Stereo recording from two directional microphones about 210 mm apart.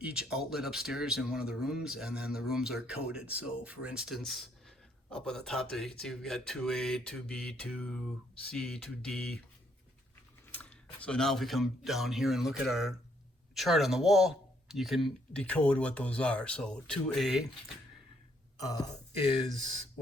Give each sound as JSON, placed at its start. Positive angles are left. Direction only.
{"t": 0.0, "sound": "speech", "side_deg": -5}
{"t": 10.5, "sound": "speech", "side_deg": 5}
{"t": 18.6, "sound": "speech", "side_deg": 15}